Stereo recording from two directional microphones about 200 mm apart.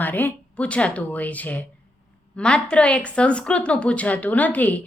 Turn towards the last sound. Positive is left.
turn(degrees=10)  # may be behind; listen again after turning